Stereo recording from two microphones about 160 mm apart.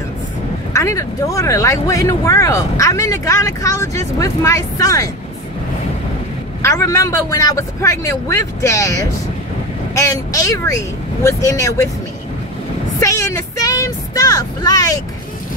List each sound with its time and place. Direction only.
0.7 s speech: 20° left (ahead or behind)
6.6 s speech: 20° left (ahead or behind)
13.0 s vehicle: 20° left (ahead or behind)